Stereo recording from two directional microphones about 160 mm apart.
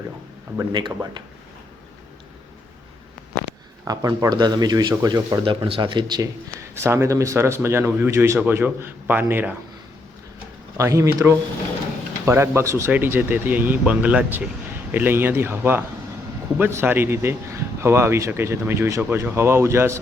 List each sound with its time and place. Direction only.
0.7 s speech: 30° right (ahead or behind)
3.8 s speech: 25° right (ahead or behind)
6.7 s a man's voice: 15° right (ahead or behind)
10.8 s a man's voice: 20° right (ahead or behind)